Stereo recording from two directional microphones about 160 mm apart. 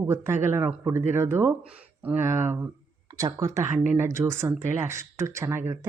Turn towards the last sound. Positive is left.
turn(degrees=-15)  # may be behind; listen again after turning